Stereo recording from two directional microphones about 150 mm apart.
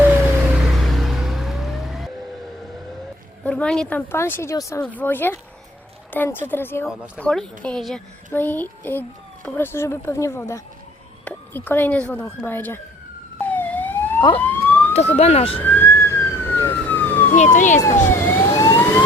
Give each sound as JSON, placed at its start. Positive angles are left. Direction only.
{"t": 0.0, "sound": "car", "side_deg": -5}
{"t": 3.4, "sound": "a child's voice", "side_deg": 5}
{"t": 13.4, "sound": "police car", "side_deg": 10}
{"t": 14.4, "sound": "emergency vehicle", "side_deg": 15}
{"t": 14.9, "sound": "speech", "side_deg": 45}
{"t": 15.5, "sound": "emergency vehicle", "side_deg": 15}
{"t": 17.3, "sound": "speech", "side_deg": 55}
{"t": 17.7, "sound": "emergency vehicle", "side_deg": 20}